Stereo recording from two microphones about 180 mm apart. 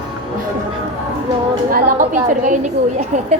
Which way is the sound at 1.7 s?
45° right (ahead or behind).